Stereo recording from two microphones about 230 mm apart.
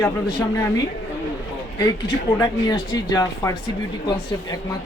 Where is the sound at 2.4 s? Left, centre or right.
Centre.